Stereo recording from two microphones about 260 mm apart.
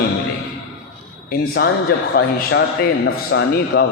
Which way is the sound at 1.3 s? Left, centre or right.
Left.